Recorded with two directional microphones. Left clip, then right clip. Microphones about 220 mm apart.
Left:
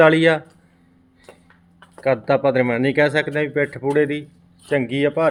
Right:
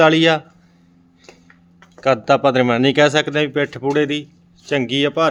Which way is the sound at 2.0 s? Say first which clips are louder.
Right 3 dB; 10° right (ahead or behind).